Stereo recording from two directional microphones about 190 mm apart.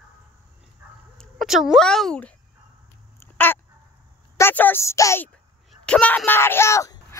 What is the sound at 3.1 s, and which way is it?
Dog, 10° left (ahead or behind).